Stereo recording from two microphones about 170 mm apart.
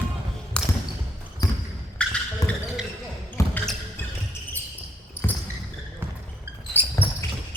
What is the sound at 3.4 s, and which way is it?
Basketball bounce, 15° left (ahead or behind).